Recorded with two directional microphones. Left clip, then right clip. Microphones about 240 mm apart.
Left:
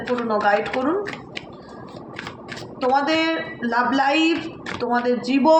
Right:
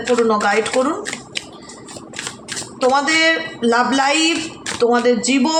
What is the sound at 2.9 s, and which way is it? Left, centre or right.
A man's voice, right.